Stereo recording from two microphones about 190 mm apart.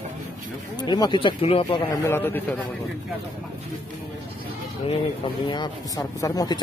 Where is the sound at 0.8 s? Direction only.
25° left (ahead or behind).